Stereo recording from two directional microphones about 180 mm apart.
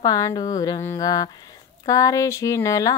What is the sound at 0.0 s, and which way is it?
Speech, 20° left (ahead or behind).